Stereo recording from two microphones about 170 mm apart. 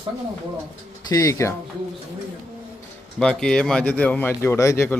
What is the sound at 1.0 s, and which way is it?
Speech, 20° left (ahead or behind).